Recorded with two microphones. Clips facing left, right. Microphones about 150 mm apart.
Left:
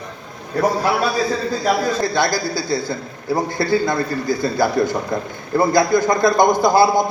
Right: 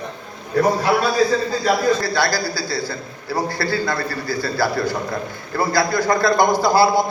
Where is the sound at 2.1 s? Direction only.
20° left (ahead or behind).